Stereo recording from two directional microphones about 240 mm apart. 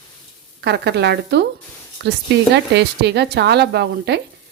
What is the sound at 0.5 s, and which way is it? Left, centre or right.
Speech, right.